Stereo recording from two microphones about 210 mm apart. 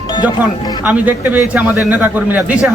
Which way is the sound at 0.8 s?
5° right (ahead or behind).